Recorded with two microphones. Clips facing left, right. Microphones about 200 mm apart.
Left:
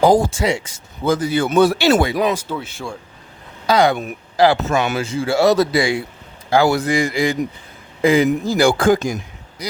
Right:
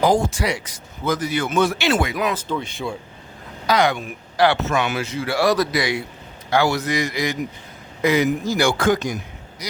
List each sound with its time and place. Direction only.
0.0 s speech: 35° left (ahead or behind)
2.3 s speech: 5° left (ahead or behind)
3.7 s speech: 30° left (ahead or behind)